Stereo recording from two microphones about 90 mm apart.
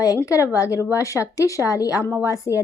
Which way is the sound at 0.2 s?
35° left (ahead or behind).